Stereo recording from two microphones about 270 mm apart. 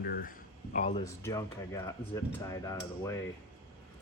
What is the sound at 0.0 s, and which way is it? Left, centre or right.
Speech, left.